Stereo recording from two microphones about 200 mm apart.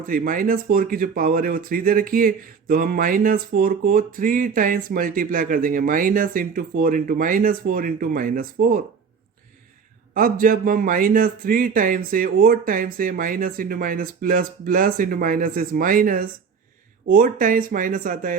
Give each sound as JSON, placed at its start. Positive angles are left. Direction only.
{"t": 0.0, "sound": "speech", "side_deg": -45}
{"t": 10.2, "sound": "speech", "side_deg": -45}